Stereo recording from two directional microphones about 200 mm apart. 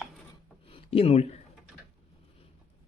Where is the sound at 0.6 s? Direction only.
30° left (ahead or behind).